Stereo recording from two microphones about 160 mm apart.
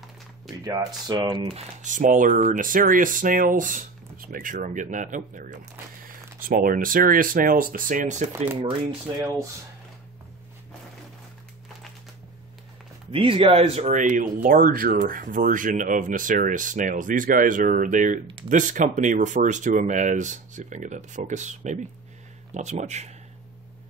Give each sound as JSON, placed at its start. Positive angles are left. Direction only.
{"t": 0.7, "sound": "speech", "side_deg": -25}
{"t": 1.5, "sound": "speech", "side_deg": -45}
{"t": 13.1, "sound": "speech", "side_deg": -35}